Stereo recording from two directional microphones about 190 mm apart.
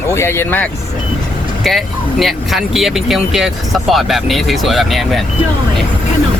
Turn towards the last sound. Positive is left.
turn(degrees=0)  # may be behind; listen again after turning